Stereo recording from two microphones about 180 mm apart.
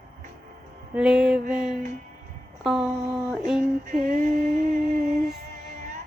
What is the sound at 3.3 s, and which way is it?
Female singing, centre (ahead or behind).